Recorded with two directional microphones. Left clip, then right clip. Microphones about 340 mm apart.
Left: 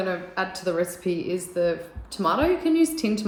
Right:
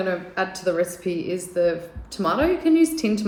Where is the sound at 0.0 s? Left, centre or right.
Centre.